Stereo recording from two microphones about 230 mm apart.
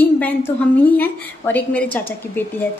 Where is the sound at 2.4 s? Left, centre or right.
Centre.